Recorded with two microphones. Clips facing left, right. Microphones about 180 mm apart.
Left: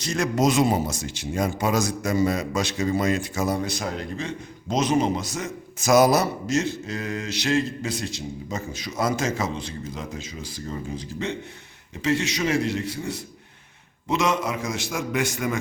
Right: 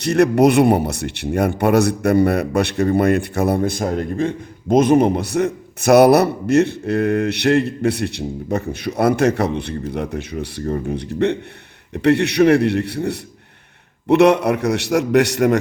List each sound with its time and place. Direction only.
0.0 s a man's voice: 60° right (ahead or behind)